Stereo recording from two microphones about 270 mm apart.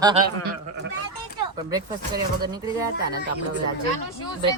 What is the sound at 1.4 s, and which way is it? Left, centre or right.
Speech, centre.